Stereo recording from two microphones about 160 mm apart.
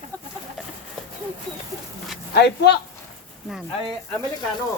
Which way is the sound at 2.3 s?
90° left.